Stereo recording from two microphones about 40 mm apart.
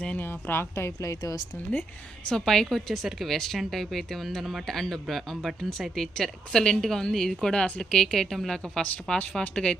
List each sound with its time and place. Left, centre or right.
0.2 s a woman's voice: left
2.3 s speech: centre
8.5 s speech: left